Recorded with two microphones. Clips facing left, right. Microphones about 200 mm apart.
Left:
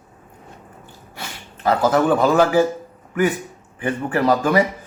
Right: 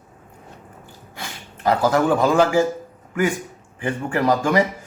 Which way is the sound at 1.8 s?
20° left (ahead or behind).